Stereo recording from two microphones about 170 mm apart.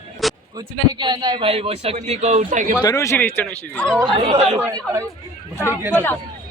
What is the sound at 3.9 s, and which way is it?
Speech, 25° right (ahead or behind).